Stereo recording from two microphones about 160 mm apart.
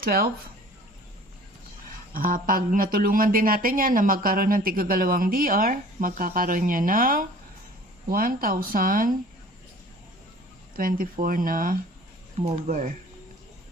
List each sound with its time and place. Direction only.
0.0 s speech: 70° right (ahead or behind)
2.1 s speech: 60° right (ahead or behind)
10.8 s speech: 65° right (ahead or behind)